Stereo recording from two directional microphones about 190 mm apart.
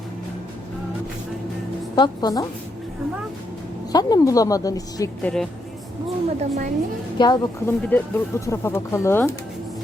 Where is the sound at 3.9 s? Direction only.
20° left (ahead or behind).